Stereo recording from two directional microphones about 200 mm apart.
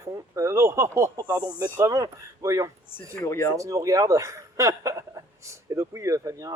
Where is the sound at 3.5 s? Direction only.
15° right (ahead or behind).